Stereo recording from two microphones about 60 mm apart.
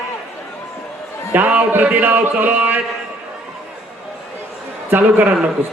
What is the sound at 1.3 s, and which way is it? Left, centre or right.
Speech, right.